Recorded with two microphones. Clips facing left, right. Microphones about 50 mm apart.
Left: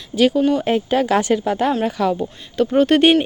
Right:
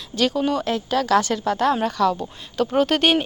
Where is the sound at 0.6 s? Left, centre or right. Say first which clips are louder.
Left 5 dB; left.